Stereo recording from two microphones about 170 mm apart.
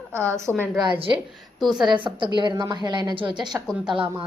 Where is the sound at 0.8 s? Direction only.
25° right (ahead or behind).